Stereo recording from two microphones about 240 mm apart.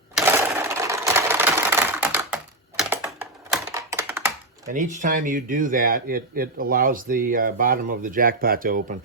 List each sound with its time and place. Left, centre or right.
0.2 s sewing machine: centre
4.7 s speech: right